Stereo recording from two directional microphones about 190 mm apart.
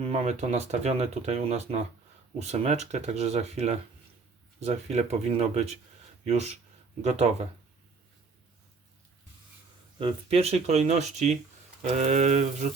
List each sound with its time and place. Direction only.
0.0 s speech: 35° right (ahead or behind)
10.0 s speech: 30° right (ahead or behind)